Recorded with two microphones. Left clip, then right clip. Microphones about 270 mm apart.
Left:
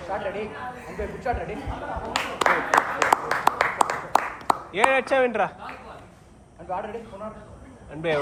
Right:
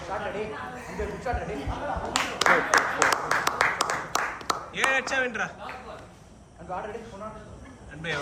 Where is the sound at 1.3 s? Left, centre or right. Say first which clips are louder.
Left 4 dB; left.